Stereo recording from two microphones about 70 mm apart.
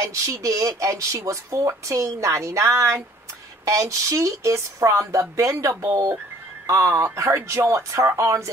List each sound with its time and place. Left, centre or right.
0.0 s speech: right
6.7 s speech: right